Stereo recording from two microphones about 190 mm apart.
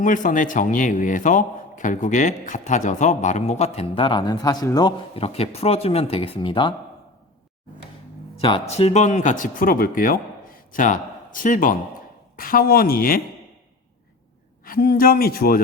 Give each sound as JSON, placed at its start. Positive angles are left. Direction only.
{"t": 0.0, "sound": "a man's voice", "side_deg": 45}
{"t": 8.4, "sound": "speech", "side_deg": 30}
{"t": 14.6, "sound": "speech", "side_deg": 50}